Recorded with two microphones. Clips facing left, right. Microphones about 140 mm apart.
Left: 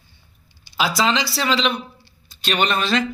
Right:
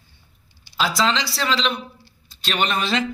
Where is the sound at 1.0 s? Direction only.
5° left (ahead or behind).